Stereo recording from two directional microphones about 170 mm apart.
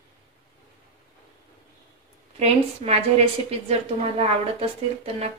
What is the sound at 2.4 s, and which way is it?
A woman's voice, 35° right (ahead or behind).